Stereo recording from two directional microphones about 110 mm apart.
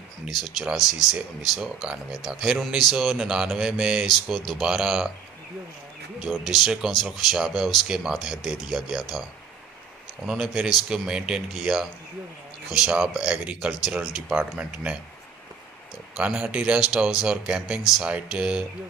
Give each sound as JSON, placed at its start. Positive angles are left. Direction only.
{"t": 0.3, "sound": "speech", "side_deg": 0}
{"t": 6.3, "sound": "speech", "side_deg": 0}
{"t": 10.2, "sound": "speech", "side_deg": -5}
{"t": 16.2, "sound": "speech", "side_deg": -10}